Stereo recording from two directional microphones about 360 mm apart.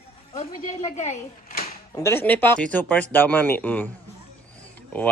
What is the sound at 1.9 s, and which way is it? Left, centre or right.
Speech, centre.